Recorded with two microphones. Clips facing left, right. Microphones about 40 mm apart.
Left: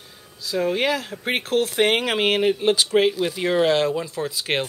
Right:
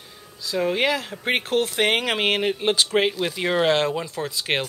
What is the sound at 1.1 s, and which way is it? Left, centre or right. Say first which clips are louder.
Speech: right 1 dB; centre.